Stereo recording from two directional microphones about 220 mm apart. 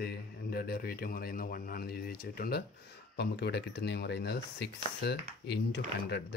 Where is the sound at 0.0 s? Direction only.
45° left (ahead or behind).